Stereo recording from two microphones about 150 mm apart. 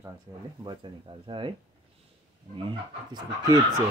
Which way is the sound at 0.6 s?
30° right (ahead or behind).